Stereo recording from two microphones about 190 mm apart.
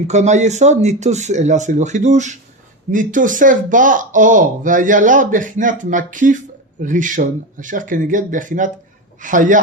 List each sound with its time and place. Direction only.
0.1 s speech: 40° right (ahead or behind)